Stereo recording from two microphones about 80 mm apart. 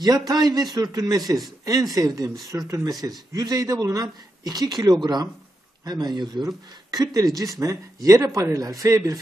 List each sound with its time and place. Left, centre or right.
0.0 s speech: right